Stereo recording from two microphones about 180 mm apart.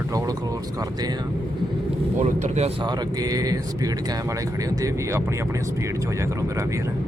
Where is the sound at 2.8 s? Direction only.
20° right (ahead or behind).